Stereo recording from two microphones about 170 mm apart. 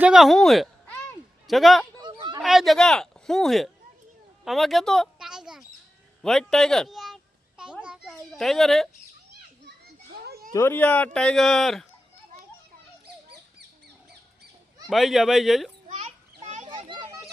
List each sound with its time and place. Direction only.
0.0 s speech: centre (ahead or behind)
2.0 s a sound: 25° right (ahead or behind)
2.4 s speech: centre (ahead or behind)
4.4 s a sound: centre (ahead or behind)
6.2 s children playing: centre (ahead or behind)
9.6 s children playing: 70° right (ahead or behind)
10.5 s speech: 15° left (ahead or behind)
14.8 s speech: centre (ahead or behind)
15.9 s children playing: 45° right (ahead or behind)
16.6 s children playing: 25° right (ahead or behind)